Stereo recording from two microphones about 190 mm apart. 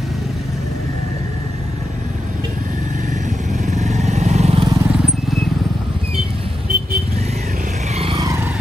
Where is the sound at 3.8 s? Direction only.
35° right (ahead or behind).